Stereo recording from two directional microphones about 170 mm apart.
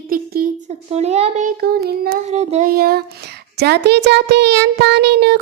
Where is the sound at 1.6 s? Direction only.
65° right (ahead or behind).